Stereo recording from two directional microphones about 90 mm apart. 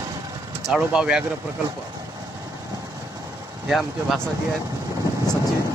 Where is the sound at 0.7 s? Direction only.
10° right (ahead or behind).